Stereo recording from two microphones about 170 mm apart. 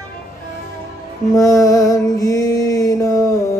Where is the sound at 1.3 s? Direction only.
20° left (ahead or behind).